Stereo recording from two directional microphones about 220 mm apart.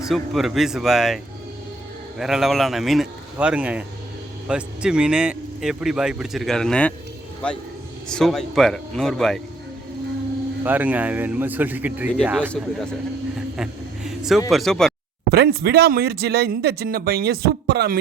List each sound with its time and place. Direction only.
0.0 s speech: centre (ahead or behind)
8.0 s speech: centre (ahead or behind)
10.6 s speech: 10° right (ahead or behind)
13.6 s vehicle: centre (ahead or behind)
14.5 s speech: centre (ahead or behind)
15.3 s speech: 45° right (ahead or behind)